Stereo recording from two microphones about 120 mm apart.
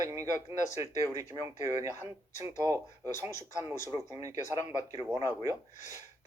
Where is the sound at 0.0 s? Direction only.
25° right (ahead or behind).